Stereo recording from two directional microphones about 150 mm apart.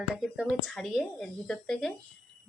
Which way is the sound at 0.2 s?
5° right (ahead or behind).